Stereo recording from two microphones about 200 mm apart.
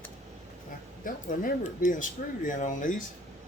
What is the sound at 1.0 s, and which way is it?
Speech, 45° left (ahead or behind).